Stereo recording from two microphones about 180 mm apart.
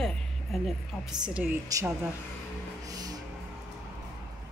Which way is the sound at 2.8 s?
20° right (ahead or behind).